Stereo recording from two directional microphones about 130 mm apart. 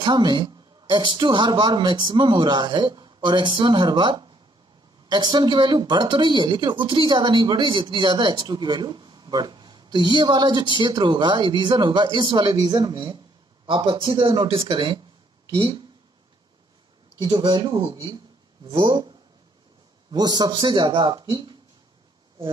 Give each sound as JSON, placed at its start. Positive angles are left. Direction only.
{"t": 0.0, "sound": "speech", "side_deg": -35}
{"t": 13.7, "sound": "speech", "side_deg": -40}
{"t": 17.2, "sound": "speech", "side_deg": -35}
{"t": 20.1, "sound": "speech", "side_deg": -30}